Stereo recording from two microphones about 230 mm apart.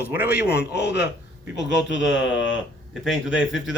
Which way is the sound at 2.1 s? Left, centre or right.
Left.